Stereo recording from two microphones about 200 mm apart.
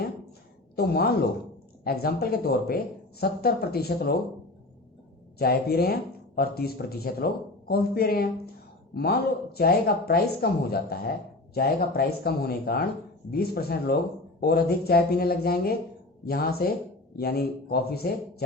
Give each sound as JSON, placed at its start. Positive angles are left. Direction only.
{"t": 0.8, "sound": "speech", "side_deg": 50}
{"t": 5.4, "sound": "speech", "side_deg": 50}